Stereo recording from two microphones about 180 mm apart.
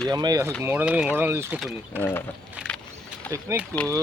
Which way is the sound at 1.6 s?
10° left (ahead or behind).